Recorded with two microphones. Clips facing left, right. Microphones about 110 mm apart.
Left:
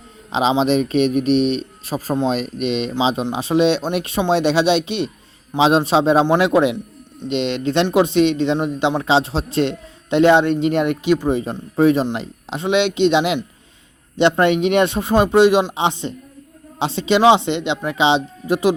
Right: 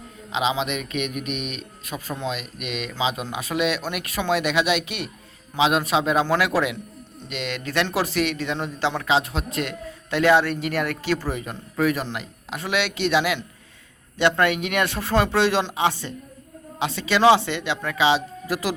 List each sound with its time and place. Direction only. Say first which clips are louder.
0.3 s a man's voice: left 8 dB; 30° left (ahead or behind)